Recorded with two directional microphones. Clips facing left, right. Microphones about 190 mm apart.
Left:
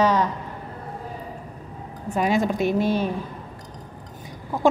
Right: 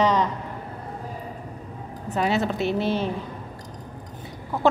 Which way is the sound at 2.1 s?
15° left (ahead or behind).